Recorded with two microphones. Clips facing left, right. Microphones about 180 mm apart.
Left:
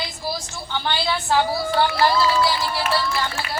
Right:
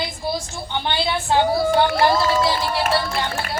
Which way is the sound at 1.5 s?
55° right (ahead or behind).